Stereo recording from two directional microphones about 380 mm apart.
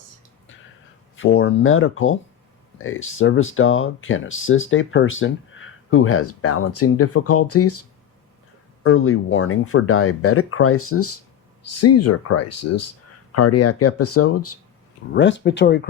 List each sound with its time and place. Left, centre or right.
1.1 s speech: left
8.8 s speech: left